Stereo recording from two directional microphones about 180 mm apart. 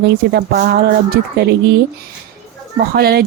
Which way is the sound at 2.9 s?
60° right (ahead or behind).